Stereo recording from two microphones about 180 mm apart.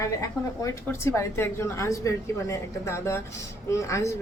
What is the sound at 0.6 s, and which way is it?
A woman's voice, 15° left (ahead or behind).